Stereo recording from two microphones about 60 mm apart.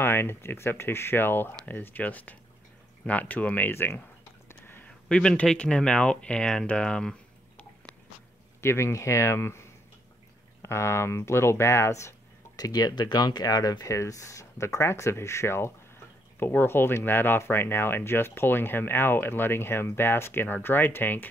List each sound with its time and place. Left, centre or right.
0.0 s speech: left
3.7 s speech: left
4.5 s a sound: left
4.8 s speech: centre
8.5 s speech: left
12.5 s speech: left